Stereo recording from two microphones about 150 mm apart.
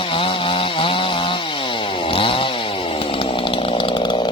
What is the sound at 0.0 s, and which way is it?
Chainsaw, 35° left (ahead or behind).